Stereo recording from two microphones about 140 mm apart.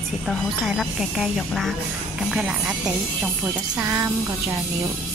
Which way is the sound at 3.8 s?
20° right (ahead or behind).